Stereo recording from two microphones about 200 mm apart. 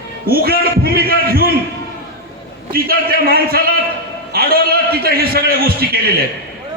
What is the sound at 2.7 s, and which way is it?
A man's voice, 50° right (ahead or behind).